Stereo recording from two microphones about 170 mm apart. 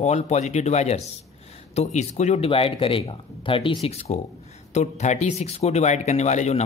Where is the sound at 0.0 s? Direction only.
40° left (ahead or behind).